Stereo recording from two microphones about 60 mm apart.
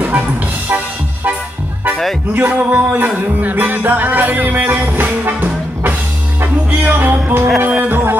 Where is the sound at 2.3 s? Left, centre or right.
Right.